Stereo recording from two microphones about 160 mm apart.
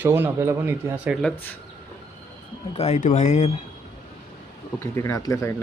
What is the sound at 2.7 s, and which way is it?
Speech, 45° left (ahead or behind).